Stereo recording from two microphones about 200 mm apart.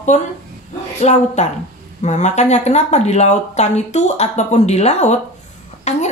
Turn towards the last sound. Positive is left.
turn(degrees=35)  # may be behind; listen again after turning